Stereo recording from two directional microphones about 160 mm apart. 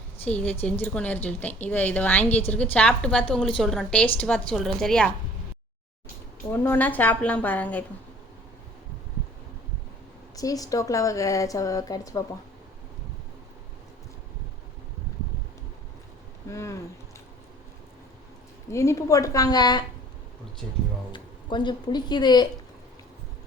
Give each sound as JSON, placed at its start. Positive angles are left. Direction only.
{"t": 0.3, "sound": "a woman's voice", "side_deg": 10}
{"t": 6.5, "sound": "a woman's voice", "side_deg": 15}
{"t": 10.3, "sound": "a woman's voice", "side_deg": 20}
{"t": 16.5, "sound": "a woman's voice", "side_deg": 20}
{"t": 18.7, "sound": "a woman's voice", "side_deg": 20}
{"t": 21.1, "sound": "a woman's voice", "side_deg": 30}